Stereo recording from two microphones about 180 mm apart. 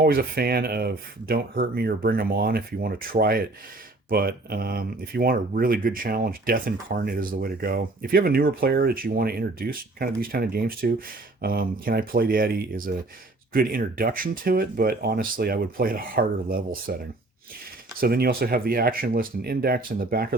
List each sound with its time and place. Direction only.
0.0 s speech: 55° right (ahead or behind)
18.0 s speech: 55° right (ahead or behind)